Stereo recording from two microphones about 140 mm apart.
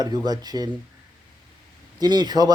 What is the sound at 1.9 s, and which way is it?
Speech, 30° right (ahead or behind).